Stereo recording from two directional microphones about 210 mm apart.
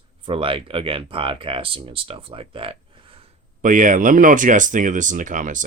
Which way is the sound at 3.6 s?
35° right (ahead or behind).